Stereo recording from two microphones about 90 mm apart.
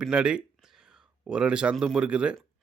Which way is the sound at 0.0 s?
10° right (ahead or behind).